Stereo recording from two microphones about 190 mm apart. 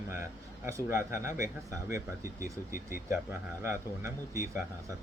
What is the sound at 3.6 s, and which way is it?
Speech, 15° right (ahead or behind).